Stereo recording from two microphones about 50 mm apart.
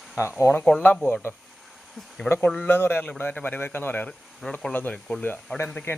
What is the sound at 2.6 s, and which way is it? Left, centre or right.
Speech, left.